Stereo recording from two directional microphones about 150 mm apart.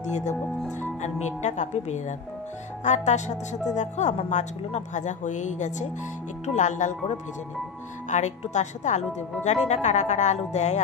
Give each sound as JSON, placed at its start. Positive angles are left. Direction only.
{"t": 0.0, "sound": "a woman's voice", "side_deg": 50}